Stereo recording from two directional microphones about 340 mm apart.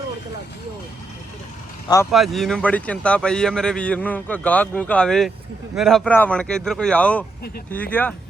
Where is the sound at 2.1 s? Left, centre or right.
Centre.